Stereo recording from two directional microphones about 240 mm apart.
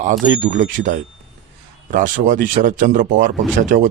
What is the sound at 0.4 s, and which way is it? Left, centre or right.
Speech, right.